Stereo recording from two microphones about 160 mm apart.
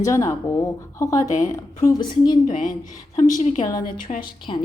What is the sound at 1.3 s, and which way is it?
Speech, 50° left (ahead or behind).